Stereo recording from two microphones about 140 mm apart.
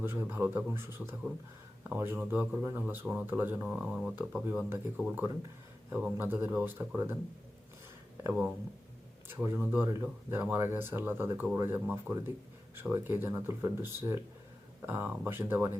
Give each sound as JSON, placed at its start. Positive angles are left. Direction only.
{"t": 0.0, "sound": "a man's voice", "side_deg": -15}
{"t": 8.2, "sound": "a man's voice", "side_deg": -15}